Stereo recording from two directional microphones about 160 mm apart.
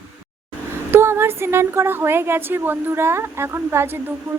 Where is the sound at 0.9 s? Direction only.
15° right (ahead or behind).